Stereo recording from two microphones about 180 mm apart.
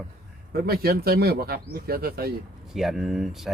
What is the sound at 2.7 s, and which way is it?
Speech, centre (ahead or behind).